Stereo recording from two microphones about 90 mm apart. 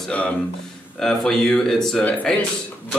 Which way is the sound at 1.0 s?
5° left (ahead or behind).